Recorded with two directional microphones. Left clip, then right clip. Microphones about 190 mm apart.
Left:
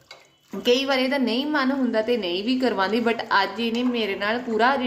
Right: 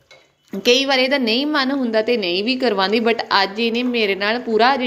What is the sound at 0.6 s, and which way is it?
A woman's voice, 15° right (ahead or behind).